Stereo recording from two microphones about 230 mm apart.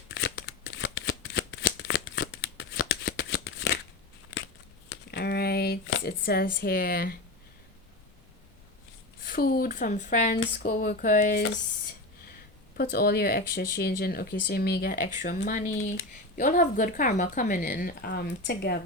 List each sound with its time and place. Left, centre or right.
0.1 s shuffling cards: left
4.9 s a sound: left
9.2 s a woman's voice: left
12.7 s a woman's voice: left